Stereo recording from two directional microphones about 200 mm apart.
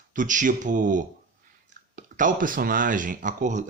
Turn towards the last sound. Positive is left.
turn(degrees=-40)  # may be behind; listen again after turning